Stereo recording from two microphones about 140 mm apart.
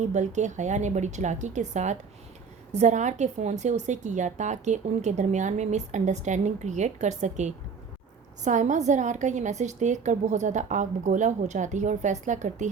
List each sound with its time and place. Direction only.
0.0 s a woman's voice: 60° right (ahead or behind)